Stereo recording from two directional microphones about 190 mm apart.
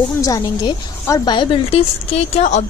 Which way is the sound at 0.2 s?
20° left (ahead or behind).